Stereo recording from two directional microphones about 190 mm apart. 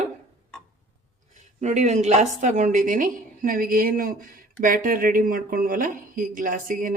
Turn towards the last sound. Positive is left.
turn(degrees=-45)  # may be behind; listen again after turning